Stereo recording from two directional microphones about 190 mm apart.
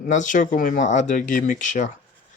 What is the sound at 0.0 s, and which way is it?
Speech, 40° left (ahead or behind).